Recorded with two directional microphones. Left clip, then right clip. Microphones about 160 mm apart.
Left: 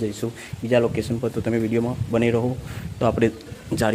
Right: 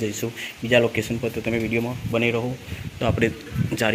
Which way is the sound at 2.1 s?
45° left (ahead or behind).